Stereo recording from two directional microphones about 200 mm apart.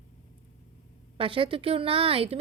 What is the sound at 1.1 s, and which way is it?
A woman's voice, 25° right (ahead or behind).